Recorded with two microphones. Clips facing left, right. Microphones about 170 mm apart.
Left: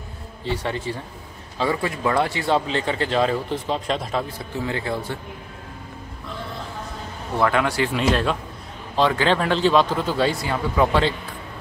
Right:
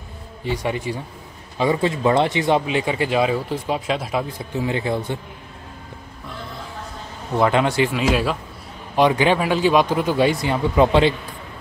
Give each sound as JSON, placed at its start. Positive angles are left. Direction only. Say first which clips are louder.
{"t": 0.4, "sound": "speech", "louder": "right 2 dB", "side_deg": -15}
{"t": 7.3, "sound": "speech", "louder": "right 3 dB", "side_deg": -20}
{"t": 7.9, "sound": "speech", "louder": "right 1 dB", "side_deg": -5}
{"t": 8.9, "sound": "speech", "louder": "right 3 dB", "side_deg": -15}